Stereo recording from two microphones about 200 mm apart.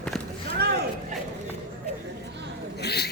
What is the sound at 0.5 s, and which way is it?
Vehicle, 55° right (ahead or behind).